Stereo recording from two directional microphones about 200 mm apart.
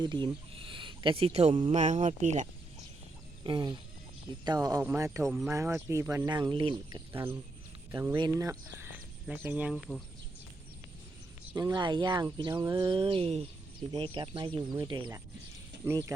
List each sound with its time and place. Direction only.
0.0 s speech: 25° right (ahead or behind)
3.4 s speech: 20° right (ahead or behind)
5.2 s speech: centre (ahead or behind)
5.5 s speech: 15° right (ahead or behind)
7.1 s speech: 10° right (ahead or behind)
9.7 s speech: centre (ahead or behind)
11.5 s speech: 20° right (ahead or behind)